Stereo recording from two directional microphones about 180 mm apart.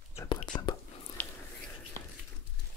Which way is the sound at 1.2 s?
10° left (ahead or behind).